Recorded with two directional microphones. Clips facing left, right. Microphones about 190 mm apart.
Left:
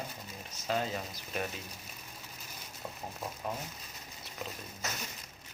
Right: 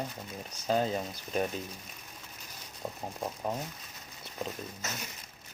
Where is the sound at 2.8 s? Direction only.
35° right (ahead or behind).